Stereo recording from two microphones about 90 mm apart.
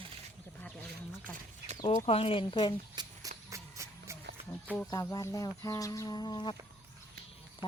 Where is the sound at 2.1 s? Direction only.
90° left; by 2.7 s 70° left (ahead or behind).